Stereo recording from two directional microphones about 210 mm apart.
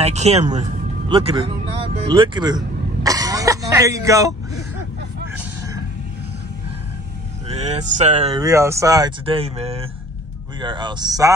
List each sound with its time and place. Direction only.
0.0 s speech: 30° right (ahead or behind)
2.0 s music: 20° right (ahead or behind)
7.4 s a sound: 30° right (ahead or behind)
8.3 s speech: 15° right (ahead or behind)